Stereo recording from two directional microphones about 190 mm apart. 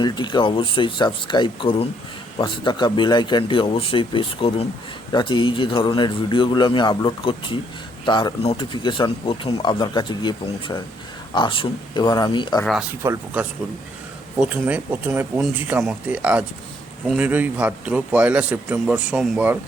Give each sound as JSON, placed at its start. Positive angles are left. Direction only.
{"t": 0.0, "sound": "speech", "side_deg": 25}
{"t": 13.0, "sound": "a man's voice", "side_deg": -10}